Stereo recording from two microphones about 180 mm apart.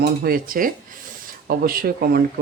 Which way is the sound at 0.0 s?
55° right (ahead or behind).